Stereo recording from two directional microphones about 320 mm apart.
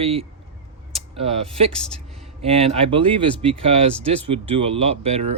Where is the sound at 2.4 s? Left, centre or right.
Centre.